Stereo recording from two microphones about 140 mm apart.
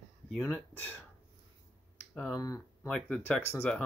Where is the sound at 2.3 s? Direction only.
25° left (ahead or behind).